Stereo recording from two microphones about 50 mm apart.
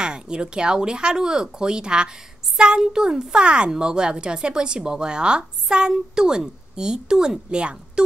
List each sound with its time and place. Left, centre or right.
0.0 s speech: centre